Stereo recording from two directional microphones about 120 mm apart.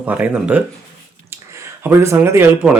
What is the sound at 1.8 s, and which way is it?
Speech, 20° right (ahead or behind).